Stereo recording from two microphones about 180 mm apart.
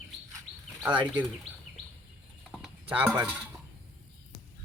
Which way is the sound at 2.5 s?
5° right (ahead or behind).